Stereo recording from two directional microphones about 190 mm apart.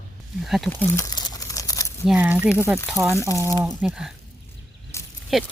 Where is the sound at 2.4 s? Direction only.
10° left (ahead or behind).